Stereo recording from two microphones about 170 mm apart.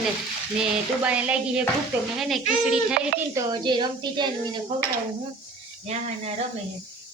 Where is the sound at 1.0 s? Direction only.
5° right (ahead or behind).